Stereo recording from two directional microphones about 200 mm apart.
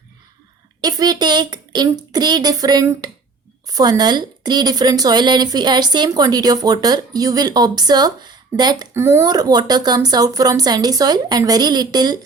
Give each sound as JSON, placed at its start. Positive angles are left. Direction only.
{"t": 0.8, "sound": "speech", "side_deg": -20}